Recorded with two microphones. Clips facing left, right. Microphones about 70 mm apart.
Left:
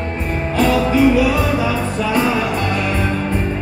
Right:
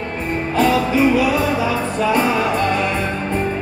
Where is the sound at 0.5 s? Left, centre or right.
Right.